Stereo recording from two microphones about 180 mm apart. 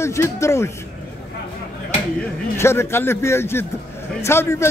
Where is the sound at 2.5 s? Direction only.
15° left (ahead or behind).